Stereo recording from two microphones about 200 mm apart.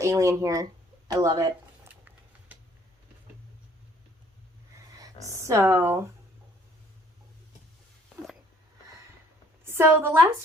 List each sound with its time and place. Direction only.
0.0 s speech: 15° right (ahead or behind)
5.5 s speech: 15° right (ahead or behind)
9.6 s a woman's voice: 10° right (ahead or behind)